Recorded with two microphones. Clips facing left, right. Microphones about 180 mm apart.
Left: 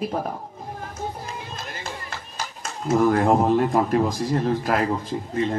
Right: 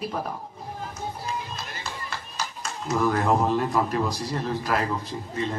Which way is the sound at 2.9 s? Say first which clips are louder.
Left 5 dB; 50° left (ahead or behind).